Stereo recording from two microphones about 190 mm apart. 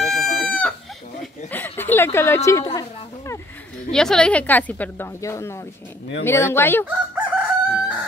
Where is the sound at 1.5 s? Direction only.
10° left (ahead or behind).